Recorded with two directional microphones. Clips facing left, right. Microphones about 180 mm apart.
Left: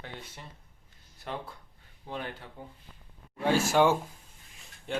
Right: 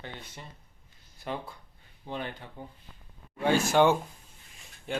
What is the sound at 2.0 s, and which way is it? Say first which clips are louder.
Speech: right 1 dB; centre (ahead or behind).